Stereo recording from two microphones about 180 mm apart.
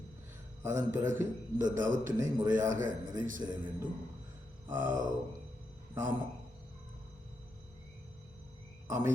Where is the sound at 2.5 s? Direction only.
45° right (ahead or behind).